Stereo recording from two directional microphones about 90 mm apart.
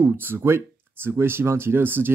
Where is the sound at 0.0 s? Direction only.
25° right (ahead or behind).